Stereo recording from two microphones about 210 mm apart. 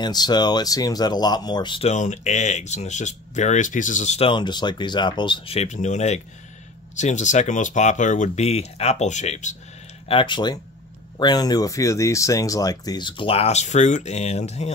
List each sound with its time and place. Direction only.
0.0 s speech: 20° left (ahead or behind)
10.0 s speech: 25° left (ahead or behind)